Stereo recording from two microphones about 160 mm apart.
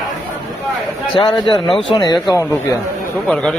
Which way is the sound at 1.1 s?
30° left (ahead or behind).